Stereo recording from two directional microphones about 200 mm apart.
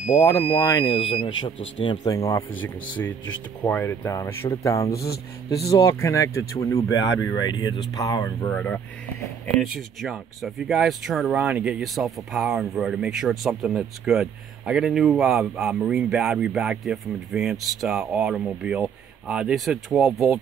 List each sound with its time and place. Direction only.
0.2 s speech: 15° left (ahead or behind)
0.8 s speech: 30° left (ahead or behind)
5.0 s speech: 50° left (ahead or behind)
5.7 s speech: 15° left (ahead or behind); by 20.3 s 5° right (ahead or behind)